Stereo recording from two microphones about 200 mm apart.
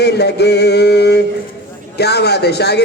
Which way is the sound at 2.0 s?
55° left (ahead or behind).